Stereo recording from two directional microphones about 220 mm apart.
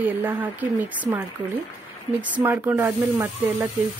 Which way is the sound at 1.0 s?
10° right (ahead or behind).